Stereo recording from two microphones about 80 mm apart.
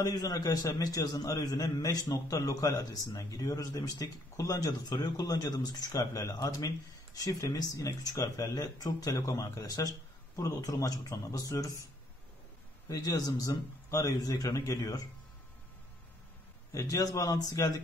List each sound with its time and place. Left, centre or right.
0.0 s a man's voice: left
12.8 s a man's voice: left
16.7 s a man's voice: left